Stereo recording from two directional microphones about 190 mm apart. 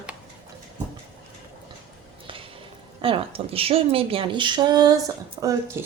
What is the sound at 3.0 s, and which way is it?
Speech, 30° right (ahead or behind).